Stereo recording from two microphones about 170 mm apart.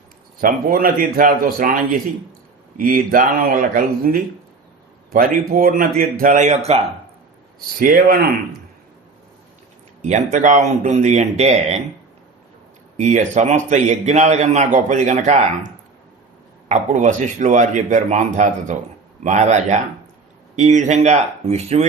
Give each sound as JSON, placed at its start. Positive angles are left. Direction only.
{"t": 0.4, "sound": "speech", "side_deg": -55}
{"t": 2.7, "sound": "a man's voice", "side_deg": -55}
{"t": 7.8, "sound": "speech", "side_deg": -55}
{"t": 10.0, "sound": "a man's voice", "side_deg": -45}
{"t": 13.0, "sound": "a man's voice", "side_deg": -45}